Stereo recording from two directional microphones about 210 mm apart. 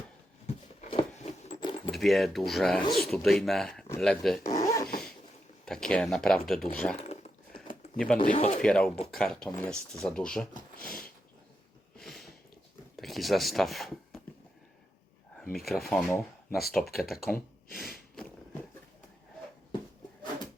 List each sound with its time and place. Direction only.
0.4 s a sound: 30° left (ahead or behind)
1.9 s speech: centre (ahead or behind)
4.4 s zipper: 15° left (ahead or behind)
5.6 s speech: 5° left (ahead or behind)
6.9 s a sound: 30° left (ahead or behind)
7.9 s speech: 5° left (ahead or behind)
8.2 s speech: 35° left (ahead or behind)
8.6 s speech: 5° left (ahead or behind)
10.8 s a sound: 45° left (ahead or behind)
11.9 s a sound: centre (ahead or behind)
13.0 s speech: centre (ahead or behind)
15.5 s speech: centre (ahead or behind)
17.7 s snort: centre (ahead or behind)